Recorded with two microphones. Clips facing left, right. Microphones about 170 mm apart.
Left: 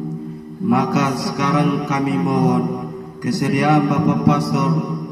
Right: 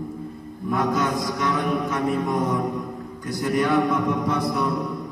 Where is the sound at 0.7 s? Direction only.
80° left.